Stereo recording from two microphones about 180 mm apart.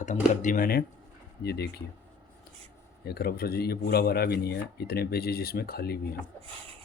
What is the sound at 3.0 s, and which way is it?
Speech, 60° left (ahead or behind).